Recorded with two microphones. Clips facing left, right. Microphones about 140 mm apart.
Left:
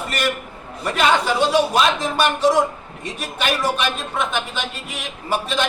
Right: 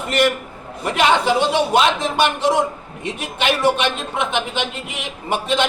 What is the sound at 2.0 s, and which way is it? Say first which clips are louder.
A man's voice: even; 25° right (ahead or behind).